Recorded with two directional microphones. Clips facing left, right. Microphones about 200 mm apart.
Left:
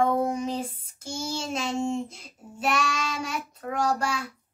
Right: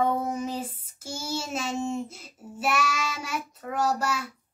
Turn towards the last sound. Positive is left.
turn(degrees=-5)  # may be behind; listen again after turning